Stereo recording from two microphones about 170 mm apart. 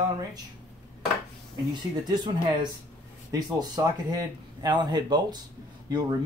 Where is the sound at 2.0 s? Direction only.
25° right (ahead or behind).